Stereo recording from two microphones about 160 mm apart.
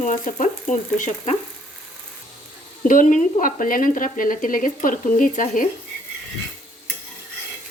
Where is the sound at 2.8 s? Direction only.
55° left (ahead or behind).